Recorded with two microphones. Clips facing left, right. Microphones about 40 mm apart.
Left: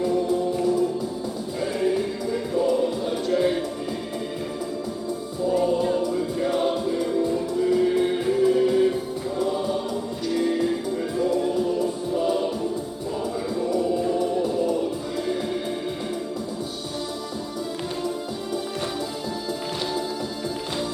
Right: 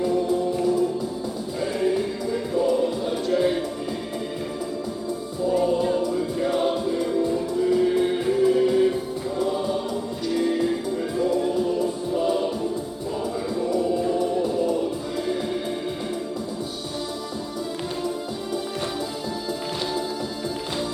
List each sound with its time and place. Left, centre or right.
0.0 s music: centre
5.5 s music: centre
9.4 s choir: centre
10.2 s music: centre
13.6 s music: centre